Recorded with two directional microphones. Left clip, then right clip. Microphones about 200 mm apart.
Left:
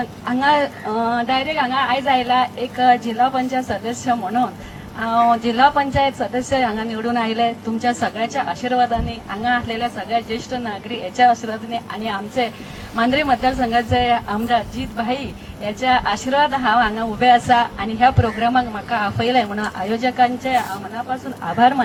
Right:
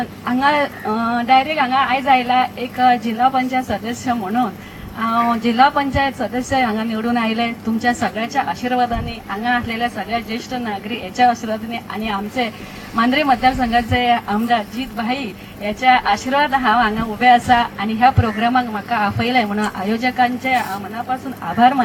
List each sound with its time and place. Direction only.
0.3 s a woman's voice: 30° right (ahead or behind)
15.6 s a woman's voice: 30° right (ahead or behind)